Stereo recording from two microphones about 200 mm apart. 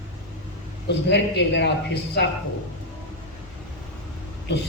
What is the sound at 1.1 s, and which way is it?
Speech, 60° left (ahead or behind).